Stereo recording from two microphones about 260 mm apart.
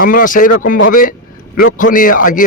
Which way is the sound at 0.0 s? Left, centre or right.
Left.